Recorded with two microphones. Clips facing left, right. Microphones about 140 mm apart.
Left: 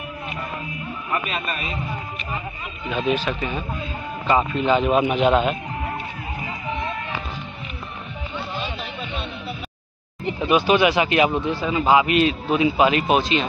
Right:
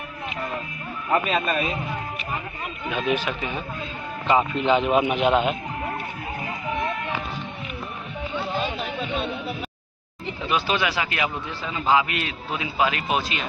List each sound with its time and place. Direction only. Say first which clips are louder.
3.1 s speech: left 3 dB; 15° right (ahead or behind)
10.5 s a man's voice: left 7 dB; 15° left (ahead or behind)